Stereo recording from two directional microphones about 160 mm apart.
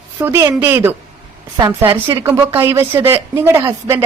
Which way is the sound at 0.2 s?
15° right (ahead or behind).